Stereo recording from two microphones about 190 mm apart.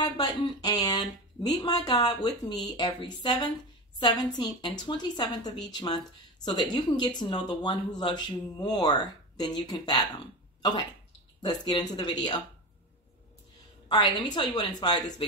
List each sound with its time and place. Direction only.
0.0 s a woman's voice: 20° left (ahead or behind)
13.8 s a woman's voice: 25° left (ahead or behind)